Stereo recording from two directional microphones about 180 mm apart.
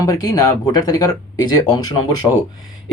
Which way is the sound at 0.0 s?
20° left (ahead or behind).